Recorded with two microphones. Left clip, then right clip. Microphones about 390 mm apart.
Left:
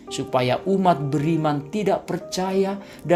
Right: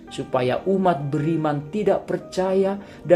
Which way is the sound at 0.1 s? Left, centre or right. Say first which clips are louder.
Left 1 dB; centre.